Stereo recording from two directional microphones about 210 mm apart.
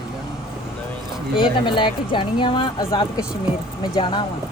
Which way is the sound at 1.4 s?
25° left (ahead or behind).